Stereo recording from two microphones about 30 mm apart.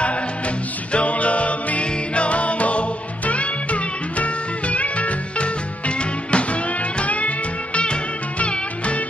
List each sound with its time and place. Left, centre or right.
0.9 s music: left
7.1 s music: left